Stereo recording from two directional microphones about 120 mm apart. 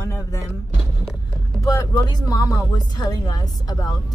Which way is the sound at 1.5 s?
30° left (ahead or behind).